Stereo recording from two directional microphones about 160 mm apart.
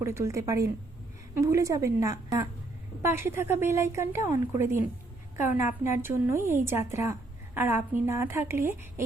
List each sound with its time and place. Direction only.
0.0 s a woman's voice: 15° right (ahead or behind)